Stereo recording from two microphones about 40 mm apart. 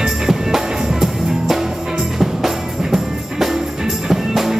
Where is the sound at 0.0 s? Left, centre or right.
Centre.